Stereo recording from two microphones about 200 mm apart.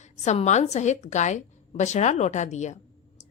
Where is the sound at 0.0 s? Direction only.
35° left (ahead or behind).